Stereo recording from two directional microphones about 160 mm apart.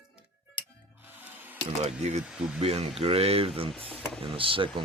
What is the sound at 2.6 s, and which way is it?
Speech, 40° right (ahead or behind).